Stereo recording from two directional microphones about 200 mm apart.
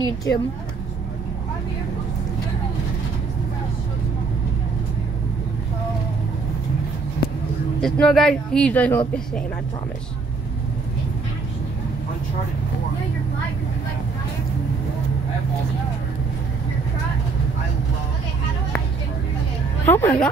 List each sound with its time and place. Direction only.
0.3 s a woman's voice: 60° left (ahead or behind)
7.2 s a sound: 50° left (ahead or behind)
7.8 s speech: centre (ahead or behind)
19.8 s speech: 10° left (ahead or behind)